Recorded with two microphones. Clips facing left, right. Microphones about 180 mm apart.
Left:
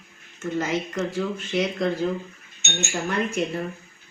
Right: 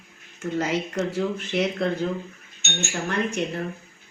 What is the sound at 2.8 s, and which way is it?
Speech, 10° left (ahead or behind).